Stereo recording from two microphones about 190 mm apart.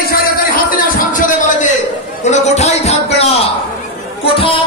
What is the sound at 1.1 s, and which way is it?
A man's voice, 45° left (ahead or behind).